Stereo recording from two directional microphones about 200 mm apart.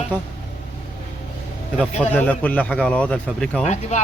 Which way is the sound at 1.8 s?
5° left (ahead or behind).